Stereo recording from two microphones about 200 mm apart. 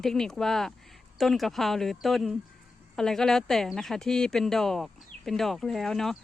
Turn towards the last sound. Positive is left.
turn(degrees=0)  # may be behind; listen again after turning